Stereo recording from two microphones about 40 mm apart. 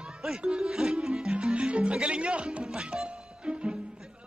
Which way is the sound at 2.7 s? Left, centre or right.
Right.